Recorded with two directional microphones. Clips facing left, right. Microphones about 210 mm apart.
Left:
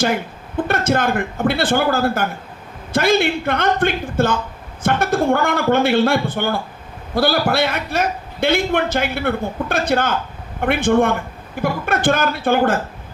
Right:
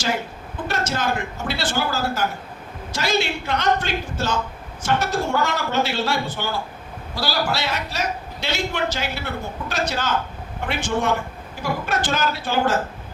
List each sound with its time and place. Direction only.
0.5 s a man's voice: 55° left (ahead or behind)